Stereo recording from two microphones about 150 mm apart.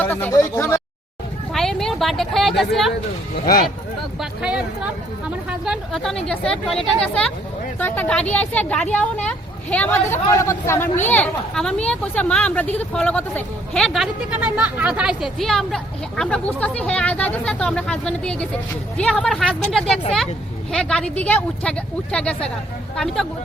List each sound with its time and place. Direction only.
0.0 s speech: 15° left (ahead or behind)
1.5 s a woman's voice: 5° left (ahead or behind)
3.3 s speech: 80° left
4.2 s speech: 5° right (ahead or behind)
7.8 s speech: 10° left (ahead or behind)